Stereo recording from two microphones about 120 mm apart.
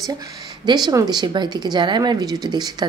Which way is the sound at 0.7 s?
35° right (ahead or behind).